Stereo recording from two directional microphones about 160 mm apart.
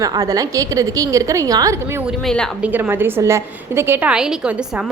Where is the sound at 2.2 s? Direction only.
5° left (ahead or behind).